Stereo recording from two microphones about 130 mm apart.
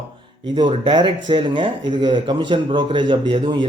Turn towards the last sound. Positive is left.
turn(degrees=-35)  # may be behind; listen again after turning